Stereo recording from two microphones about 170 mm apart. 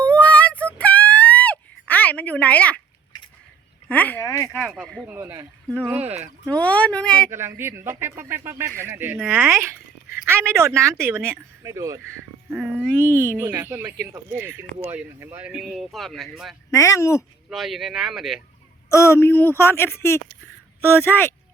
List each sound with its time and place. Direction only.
0.0 s a sound: 10° left (ahead or behind)
3.8 s speech: 10° left (ahead or behind)
4.6 s speech: centre (ahead or behind)
5.1 s speech: 15° right (ahead or behind)
6.5 s speech: 10° left (ahead or behind)
7.3 s speech: 15° right (ahead or behind)
13.1 s speech: 15° left (ahead or behind)
13.4 s speech: 15° right (ahead or behind); by 16.3 s centre (ahead or behind)
16.7 s speech: 20° left (ahead or behind)
17.5 s speech: centre (ahead or behind)
18.9 s speech: 15° left (ahead or behind)